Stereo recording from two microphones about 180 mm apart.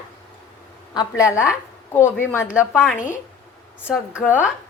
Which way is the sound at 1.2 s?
15° left (ahead or behind).